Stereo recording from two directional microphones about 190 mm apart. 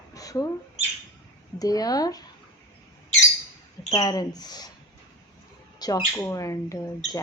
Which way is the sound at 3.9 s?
20° left (ahead or behind).